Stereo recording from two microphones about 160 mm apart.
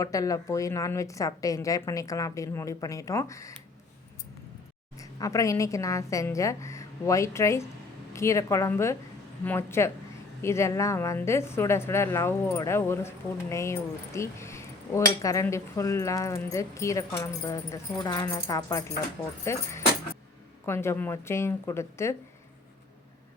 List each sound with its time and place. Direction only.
0.0 s a woman's voice: 20° left (ahead or behind)
4.9 s a woman's voice: 20° left (ahead or behind)
20.7 s a woman's voice: 15° left (ahead or behind)